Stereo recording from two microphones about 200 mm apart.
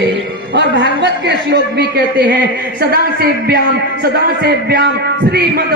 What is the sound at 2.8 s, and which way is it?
Speech, 50° right (ahead or behind).